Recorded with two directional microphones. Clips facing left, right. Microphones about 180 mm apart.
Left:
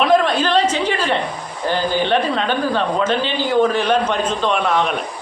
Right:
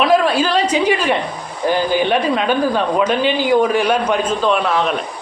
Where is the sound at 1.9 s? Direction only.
10° right (ahead or behind).